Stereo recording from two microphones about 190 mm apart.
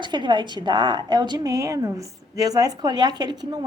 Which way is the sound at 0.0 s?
25° right (ahead or behind).